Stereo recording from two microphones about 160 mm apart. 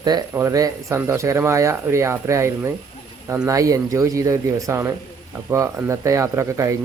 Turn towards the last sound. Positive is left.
turn(degrees=-20)  # may be behind; listen again after turning